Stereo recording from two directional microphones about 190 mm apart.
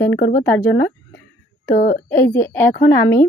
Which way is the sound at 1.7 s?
45° left (ahead or behind).